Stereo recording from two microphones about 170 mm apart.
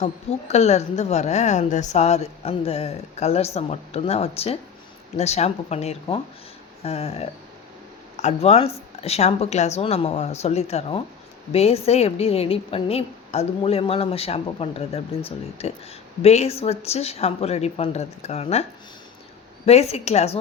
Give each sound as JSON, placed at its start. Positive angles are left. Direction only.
{"t": 0.0, "sound": "a woman's voice", "side_deg": 40}
{"t": 19.6, "sound": "a woman's voice", "side_deg": 35}